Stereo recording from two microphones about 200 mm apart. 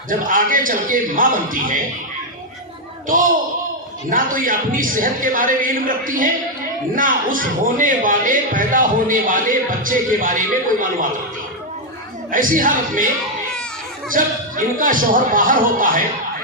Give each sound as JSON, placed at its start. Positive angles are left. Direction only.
{"t": 0.1, "sound": "speech", "side_deg": -45}
{"t": 4.1, "sound": "speech", "side_deg": -45}
{"t": 12.3, "sound": "speech", "side_deg": -45}
{"t": 14.1, "sound": "speech", "side_deg": -45}